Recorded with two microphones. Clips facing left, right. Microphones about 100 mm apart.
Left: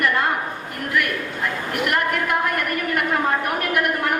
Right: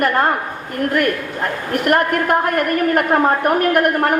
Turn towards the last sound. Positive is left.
turn(degrees=-45)  # may be behind; listen again after turning